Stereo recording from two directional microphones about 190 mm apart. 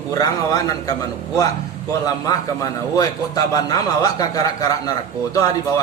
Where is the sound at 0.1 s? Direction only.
15° left (ahead or behind).